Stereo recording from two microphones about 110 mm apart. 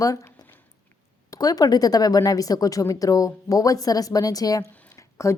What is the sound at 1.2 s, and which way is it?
Speech, 35° left (ahead or behind).